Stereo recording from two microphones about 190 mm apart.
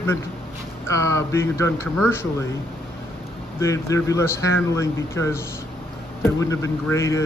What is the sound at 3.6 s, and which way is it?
Speech, 15° left (ahead or behind).